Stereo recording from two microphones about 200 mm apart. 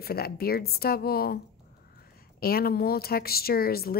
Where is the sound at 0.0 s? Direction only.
50° left (ahead or behind).